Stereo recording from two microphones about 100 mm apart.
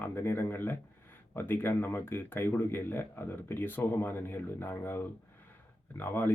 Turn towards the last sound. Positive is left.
turn(degrees=20)  # may be behind; listen again after turning